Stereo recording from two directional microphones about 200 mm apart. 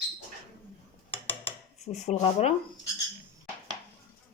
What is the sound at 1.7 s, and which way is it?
Speech, 35° left (ahead or behind).